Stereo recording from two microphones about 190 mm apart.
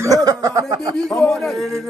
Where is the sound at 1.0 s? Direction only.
5° left (ahead or behind).